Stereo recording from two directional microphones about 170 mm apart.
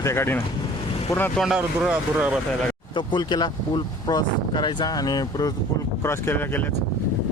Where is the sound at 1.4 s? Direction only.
5° right (ahead or behind).